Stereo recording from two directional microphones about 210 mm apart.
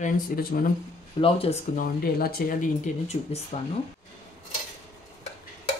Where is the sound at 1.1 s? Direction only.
25° left (ahead or behind).